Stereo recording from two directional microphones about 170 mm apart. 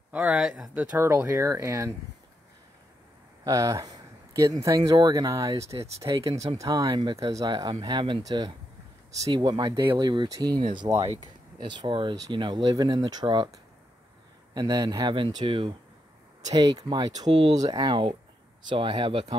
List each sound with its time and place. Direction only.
0.1 s speech: 5° right (ahead or behind)
3.4 s speech: 20° right (ahead or behind)
14.5 s speech: 25° right (ahead or behind)